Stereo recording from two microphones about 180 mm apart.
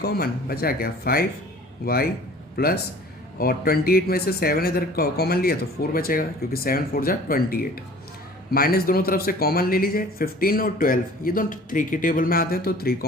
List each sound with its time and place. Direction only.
0.0 s a man's voice: 60° left (ahead or behind)